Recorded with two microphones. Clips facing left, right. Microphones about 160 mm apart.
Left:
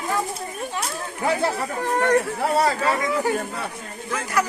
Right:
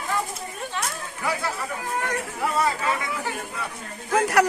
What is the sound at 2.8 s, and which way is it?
Speech, 40° left (ahead or behind).